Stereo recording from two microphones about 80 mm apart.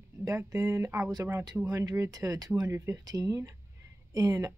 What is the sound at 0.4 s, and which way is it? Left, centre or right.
Speech, right.